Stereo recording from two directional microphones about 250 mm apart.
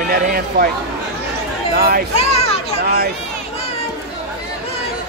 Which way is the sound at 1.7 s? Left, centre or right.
Right.